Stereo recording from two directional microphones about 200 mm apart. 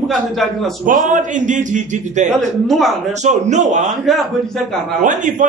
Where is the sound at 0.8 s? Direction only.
40° right (ahead or behind).